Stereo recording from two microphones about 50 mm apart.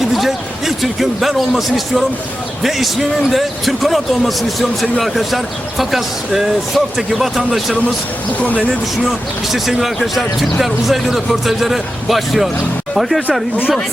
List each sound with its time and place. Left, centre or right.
0.0 s a sound: centre
2.6 s a man's voice: centre
9.0 s a man's voice: centre